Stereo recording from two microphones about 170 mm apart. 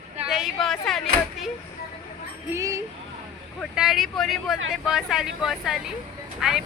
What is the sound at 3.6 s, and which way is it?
Speech, centre (ahead or behind).